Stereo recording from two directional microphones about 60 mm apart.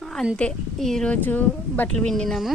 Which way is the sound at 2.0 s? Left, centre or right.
Centre.